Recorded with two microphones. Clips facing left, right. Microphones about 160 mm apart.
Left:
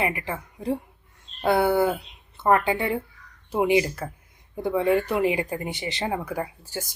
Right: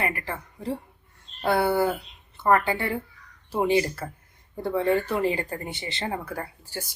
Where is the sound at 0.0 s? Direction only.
20° left (ahead or behind).